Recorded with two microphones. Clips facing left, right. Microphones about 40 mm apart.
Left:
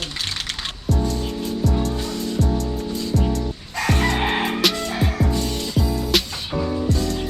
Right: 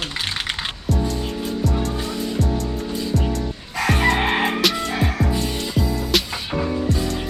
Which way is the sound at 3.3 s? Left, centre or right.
Centre.